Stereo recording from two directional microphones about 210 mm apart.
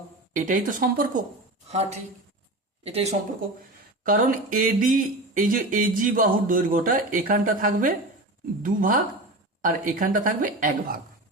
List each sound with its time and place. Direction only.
0.3 s speech: 40° right (ahead or behind)
2.8 s speech: 30° right (ahead or behind)
4.0 s speech: 40° right (ahead or behind)